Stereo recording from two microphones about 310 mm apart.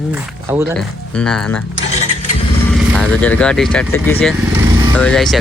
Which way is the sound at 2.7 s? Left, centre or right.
Centre.